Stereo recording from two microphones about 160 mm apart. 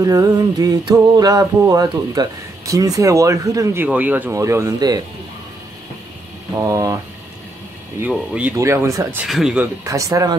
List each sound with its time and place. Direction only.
0.0 s music: 20° right (ahead or behind)
6.5 s music: 20° right (ahead or behind)
8.0 s speech: 5° right (ahead or behind)
8.5 s speech: 20° right (ahead or behind)
9.2 s speech: 5° right (ahead or behind)
9.8 s music: 20° right (ahead or behind)